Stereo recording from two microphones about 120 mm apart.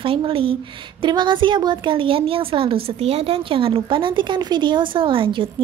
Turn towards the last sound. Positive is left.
turn(degrees=-50)  # may be behind; listen again after turning